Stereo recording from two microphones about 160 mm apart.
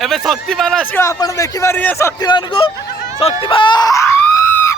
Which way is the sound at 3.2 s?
35° left (ahead or behind).